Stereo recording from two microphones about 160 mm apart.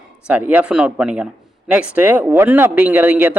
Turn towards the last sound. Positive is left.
turn(degrees=-10)  # may be behind; listen again after turning